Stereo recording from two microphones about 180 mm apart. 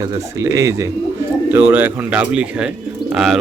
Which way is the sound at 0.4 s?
15° right (ahead or behind).